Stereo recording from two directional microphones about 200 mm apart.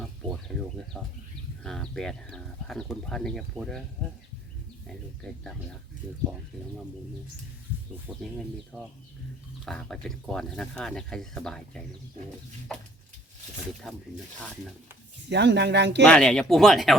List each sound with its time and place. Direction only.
0.0 s speech: centre (ahead or behind)
8.7 s speech: 5° right (ahead or behind)
13.9 s speech: centre (ahead or behind)
15.3 s speech: 60° right (ahead or behind)
16.0 s speech: 5° left (ahead or behind)